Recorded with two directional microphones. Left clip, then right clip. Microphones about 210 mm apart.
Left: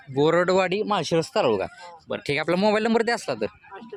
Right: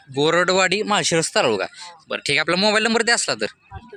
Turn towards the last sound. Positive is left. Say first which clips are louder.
# right 5 dB
turn(degrees=-5)  # may be behind; listen again after turning